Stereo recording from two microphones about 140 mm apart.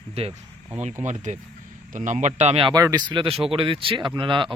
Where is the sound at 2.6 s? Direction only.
25° right (ahead or behind).